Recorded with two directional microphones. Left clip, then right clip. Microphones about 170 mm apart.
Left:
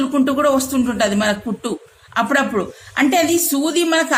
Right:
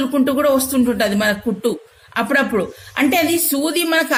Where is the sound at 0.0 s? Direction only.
45° right (ahead or behind).